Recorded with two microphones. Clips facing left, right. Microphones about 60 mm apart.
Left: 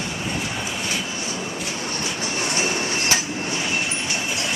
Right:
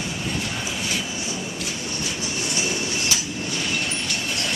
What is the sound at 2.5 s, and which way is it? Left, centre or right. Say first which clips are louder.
Train: left 2 dB; left.